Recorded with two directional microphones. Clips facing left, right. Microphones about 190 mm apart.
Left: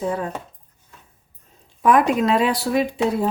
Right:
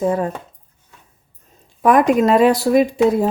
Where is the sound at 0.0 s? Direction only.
50° right (ahead or behind).